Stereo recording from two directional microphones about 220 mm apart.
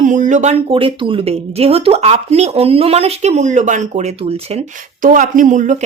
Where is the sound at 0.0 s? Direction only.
35° right (ahead or behind).